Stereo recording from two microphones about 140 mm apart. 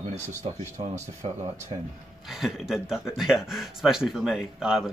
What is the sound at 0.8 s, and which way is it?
Speech, 45° right (ahead or behind).